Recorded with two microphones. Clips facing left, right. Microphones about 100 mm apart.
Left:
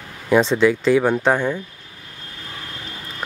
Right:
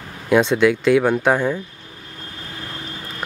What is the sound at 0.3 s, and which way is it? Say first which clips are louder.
Speech: even; centre (ahead or behind).